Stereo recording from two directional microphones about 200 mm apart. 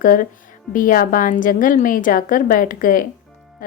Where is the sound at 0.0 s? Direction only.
45° left (ahead or behind).